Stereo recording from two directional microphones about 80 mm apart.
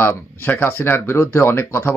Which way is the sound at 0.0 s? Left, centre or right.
Left.